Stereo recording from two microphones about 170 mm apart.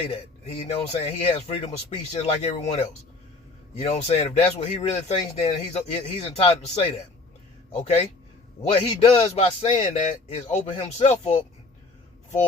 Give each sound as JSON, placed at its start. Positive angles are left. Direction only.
{"t": 0.1, "sound": "speech", "side_deg": 35}